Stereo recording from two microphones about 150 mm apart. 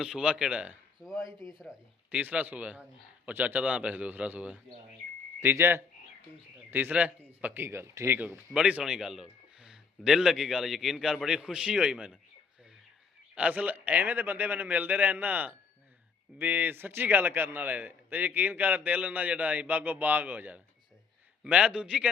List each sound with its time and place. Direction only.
0.0 s speech: 5° right (ahead or behind)
1.2 s speech: 20° left (ahead or behind)
2.0 s a man's voice: 10° right (ahead or behind)
13.3 s a man's voice: 10° right (ahead or behind)